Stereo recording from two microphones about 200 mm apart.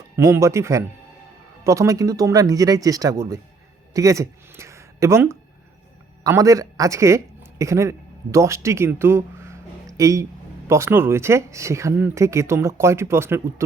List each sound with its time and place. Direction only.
0.2 s speech: 15° right (ahead or behind)